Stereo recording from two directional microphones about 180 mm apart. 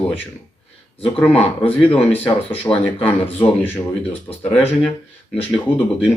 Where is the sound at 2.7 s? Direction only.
15° left (ahead or behind).